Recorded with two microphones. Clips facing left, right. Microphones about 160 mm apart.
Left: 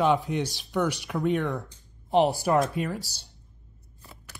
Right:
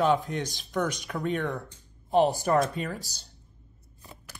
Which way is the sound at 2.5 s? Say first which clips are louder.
Left 1 dB; 10° left (ahead or behind).